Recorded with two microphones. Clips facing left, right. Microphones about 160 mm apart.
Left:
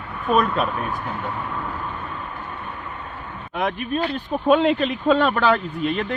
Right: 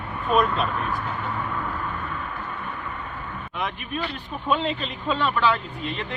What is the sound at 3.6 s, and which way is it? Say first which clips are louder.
Speech: left 7 dB; 45° left (ahead or behind).